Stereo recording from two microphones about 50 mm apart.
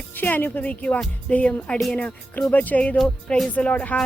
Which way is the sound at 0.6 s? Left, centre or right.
Left.